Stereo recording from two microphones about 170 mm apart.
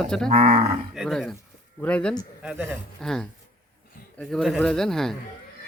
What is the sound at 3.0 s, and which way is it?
Speech, 5° left (ahead or behind).